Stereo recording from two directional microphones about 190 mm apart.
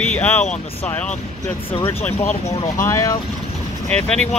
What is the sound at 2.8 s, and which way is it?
Speech, 15° left (ahead or behind).